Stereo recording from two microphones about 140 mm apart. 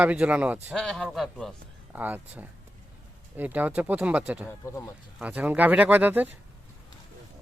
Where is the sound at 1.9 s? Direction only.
10° right (ahead or behind).